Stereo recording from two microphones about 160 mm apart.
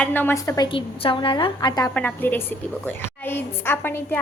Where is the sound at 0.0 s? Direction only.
10° left (ahead or behind).